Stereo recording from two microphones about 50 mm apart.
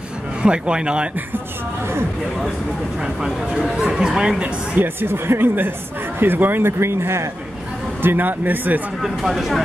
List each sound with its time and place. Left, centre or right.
0.4 s speech: centre
3.5 s speech: centre
4.7 s speech: right
6.8 s speech: right
8.0 s speech: right
9.0 s speech: centre